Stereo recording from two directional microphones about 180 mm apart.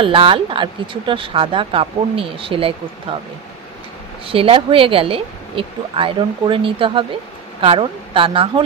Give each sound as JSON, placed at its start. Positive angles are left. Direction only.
{"t": 0.0, "sound": "speech", "side_deg": -30}
{"t": 4.3, "sound": "speech", "side_deg": -30}